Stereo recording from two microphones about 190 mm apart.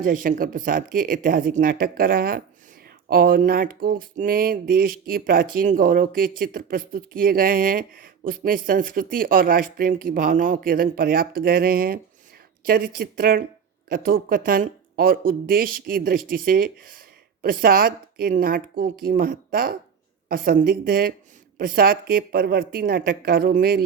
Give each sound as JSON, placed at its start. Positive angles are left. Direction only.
{"t": 0.0, "sound": "speech", "side_deg": -45}